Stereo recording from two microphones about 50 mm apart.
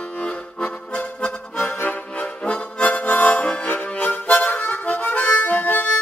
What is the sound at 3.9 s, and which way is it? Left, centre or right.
Harmonica, left.